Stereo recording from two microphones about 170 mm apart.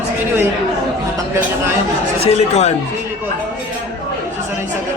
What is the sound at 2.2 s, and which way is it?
Speech, 40° left (ahead or behind).